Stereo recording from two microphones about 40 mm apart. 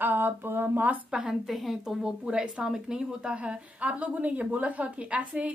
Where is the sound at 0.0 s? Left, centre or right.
Right.